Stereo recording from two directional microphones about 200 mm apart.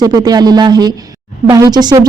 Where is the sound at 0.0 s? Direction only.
20° right (ahead or behind).